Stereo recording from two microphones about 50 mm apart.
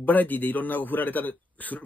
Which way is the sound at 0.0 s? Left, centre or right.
Left.